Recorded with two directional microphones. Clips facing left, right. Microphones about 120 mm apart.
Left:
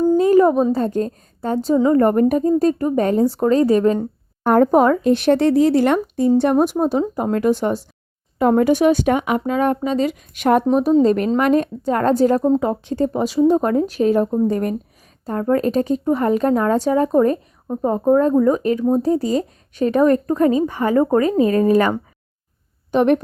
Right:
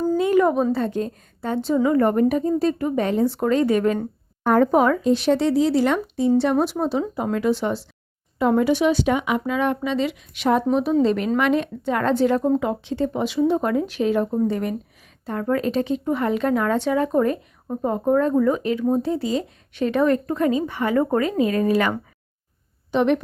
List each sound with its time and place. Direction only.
0.2 s a woman's voice: 35° left (ahead or behind)
4.4 s speech: 45° left (ahead or behind)
5.0 s a woman's voice: 55° left (ahead or behind)